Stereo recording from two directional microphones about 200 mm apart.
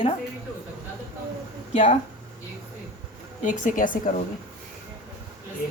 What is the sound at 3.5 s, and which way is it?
Speech, 40° left (ahead or behind).